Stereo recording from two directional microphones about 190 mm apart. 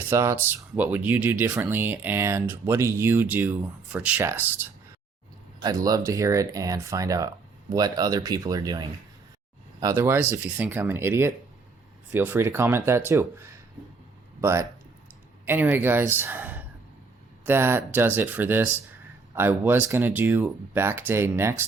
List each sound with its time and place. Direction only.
0.0 s speech: 15° right (ahead or behind)